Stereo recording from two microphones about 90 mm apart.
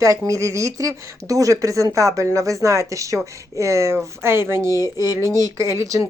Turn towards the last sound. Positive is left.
turn(degrees=-35)  # may be behind; listen again after turning